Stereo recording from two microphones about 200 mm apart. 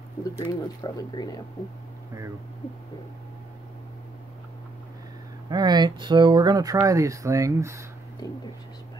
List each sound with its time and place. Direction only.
0.4 s speech: 20° left (ahead or behind)
5.5 s speech: 20° right (ahead or behind)